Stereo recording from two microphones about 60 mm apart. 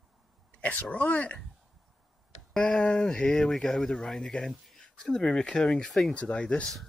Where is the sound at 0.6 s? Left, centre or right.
Left.